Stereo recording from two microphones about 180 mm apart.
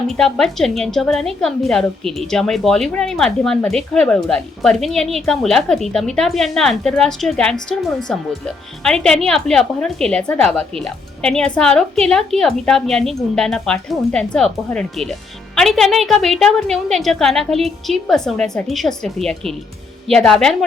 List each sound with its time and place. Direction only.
0.2 s a woman's voice: centre (ahead or behind)